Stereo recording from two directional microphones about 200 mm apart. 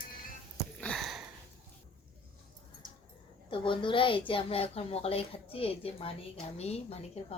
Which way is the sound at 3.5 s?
25° left (ahead or behind).